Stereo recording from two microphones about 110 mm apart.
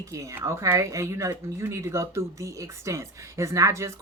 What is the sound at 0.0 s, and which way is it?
Speech, 30° right (ahead or behind).